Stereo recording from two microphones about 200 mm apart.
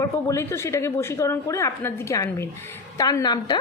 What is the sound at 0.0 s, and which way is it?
A woman's voice, 15° left (ahead or behind).